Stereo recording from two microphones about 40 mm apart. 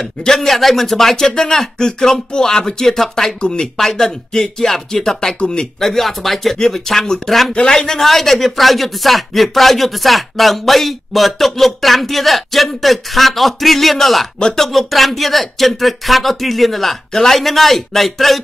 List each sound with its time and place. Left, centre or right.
0.2 s speech: centre
5.4 s speech: left
5.8 s speech: centre